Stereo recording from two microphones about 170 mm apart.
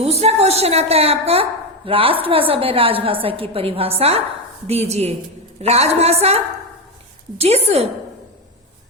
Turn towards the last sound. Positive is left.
turn(degrees=-40)  # may be behind; listen again after turning